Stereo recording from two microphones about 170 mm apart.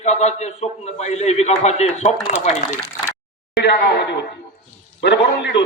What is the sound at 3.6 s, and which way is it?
A man's voice, 80° left.